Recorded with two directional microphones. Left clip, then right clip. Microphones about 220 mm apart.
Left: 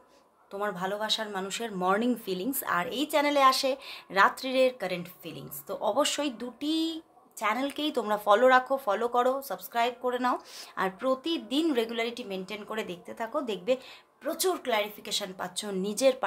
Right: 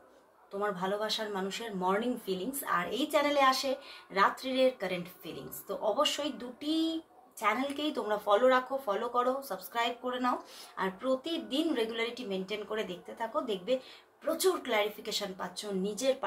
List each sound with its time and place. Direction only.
0.6 s a woman's voice: 40° left (ahead or behind)